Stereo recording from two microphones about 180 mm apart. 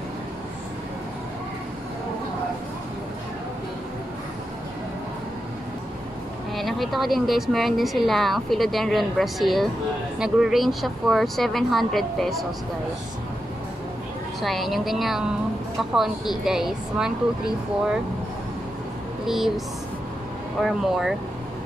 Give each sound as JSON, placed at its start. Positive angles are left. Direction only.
{"t": 6.5, "sound": "a woman's voice", "side_deg": 0}
{"t": 14.4, "sound": "a woman's voice", "side_deg": 0}
{"t": 19.2, "sound": "a woman's voice", "side_deg": 0}
{"t": 20.6, "sound": "a woman's voice", "side_deg": 0}